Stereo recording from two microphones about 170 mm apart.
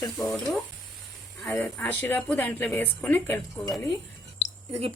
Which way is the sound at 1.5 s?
10° left (ahead or behind).